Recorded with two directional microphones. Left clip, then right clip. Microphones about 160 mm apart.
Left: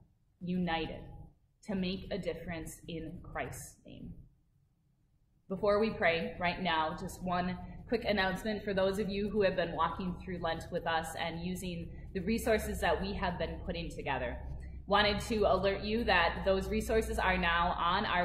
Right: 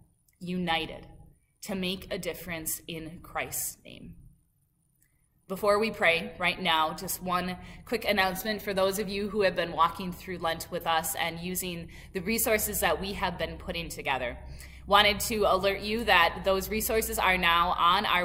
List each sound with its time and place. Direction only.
0.5 s a woman's voice: 25° right (ahead or behind)
5.5 s a woman's voice: 25° right (ahead or behind)